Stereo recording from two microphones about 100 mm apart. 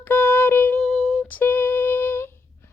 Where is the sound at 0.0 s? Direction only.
20° left (ahead or behind).